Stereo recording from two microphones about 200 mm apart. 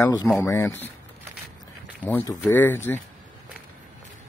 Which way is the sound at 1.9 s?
10° left (ahead or behind).